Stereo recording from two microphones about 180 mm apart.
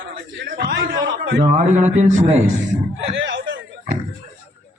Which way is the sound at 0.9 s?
85° right.